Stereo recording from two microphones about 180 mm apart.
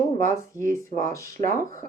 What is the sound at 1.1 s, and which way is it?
Speech, 15° left (ahead or behind).